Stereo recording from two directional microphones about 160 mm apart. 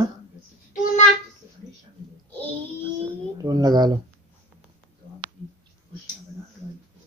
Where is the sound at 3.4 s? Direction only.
25° right (ahead or behind).